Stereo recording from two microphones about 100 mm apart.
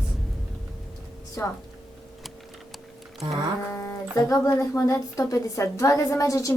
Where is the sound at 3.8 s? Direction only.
30° left (ahead or behind).